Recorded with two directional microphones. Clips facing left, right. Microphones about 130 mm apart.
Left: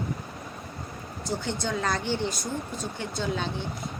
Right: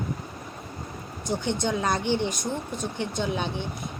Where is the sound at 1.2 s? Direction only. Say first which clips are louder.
Right 3 dB; 20° right (ahead or behind).